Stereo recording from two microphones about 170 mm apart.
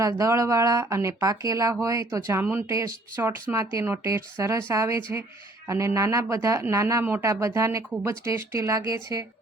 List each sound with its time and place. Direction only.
0.0 s speech: 20° right (ahead or behind)